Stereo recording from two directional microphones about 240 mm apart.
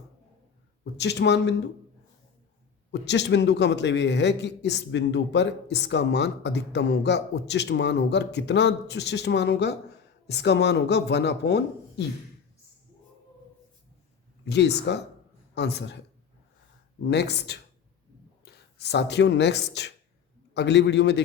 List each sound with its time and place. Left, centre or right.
0.9 s a man's voice: left
2.9 s a man's voice: left
14.4 s a man's voice: left
17.0 s a man's voice: left